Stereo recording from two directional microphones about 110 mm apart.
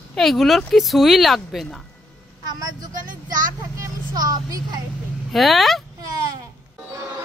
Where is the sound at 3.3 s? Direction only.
30° right (ahead or behind).